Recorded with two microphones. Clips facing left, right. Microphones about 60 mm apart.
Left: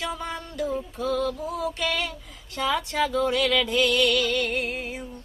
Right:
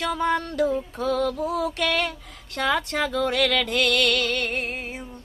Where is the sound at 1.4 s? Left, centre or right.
Right.